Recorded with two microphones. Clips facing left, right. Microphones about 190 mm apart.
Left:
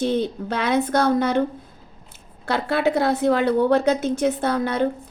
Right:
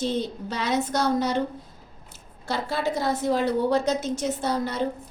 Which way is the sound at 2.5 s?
60° left (ahead or behind).